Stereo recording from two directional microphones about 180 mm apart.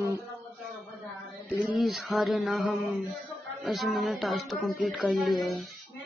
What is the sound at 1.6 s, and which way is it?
Speech, centre (ahead or behind).